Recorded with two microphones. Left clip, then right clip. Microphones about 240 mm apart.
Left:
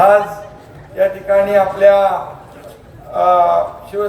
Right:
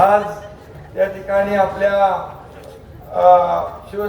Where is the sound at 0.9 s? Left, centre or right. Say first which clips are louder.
Left 4 dB; left.